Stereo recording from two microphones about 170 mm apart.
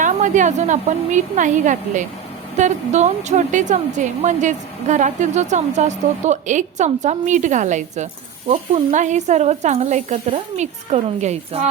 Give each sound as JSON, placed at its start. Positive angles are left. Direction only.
{"t": 0.0, "sound": "a woman's voice", "side_deg": -45}